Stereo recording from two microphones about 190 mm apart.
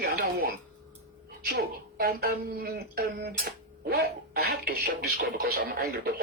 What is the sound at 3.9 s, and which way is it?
Music, 55° right (ahead or behind).